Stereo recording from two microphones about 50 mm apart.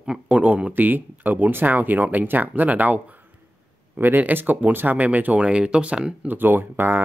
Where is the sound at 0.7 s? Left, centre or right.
Right.